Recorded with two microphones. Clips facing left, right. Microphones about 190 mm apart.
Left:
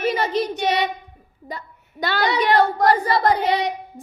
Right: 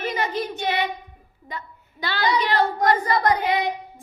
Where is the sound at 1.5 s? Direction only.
35° left (ahead or behind).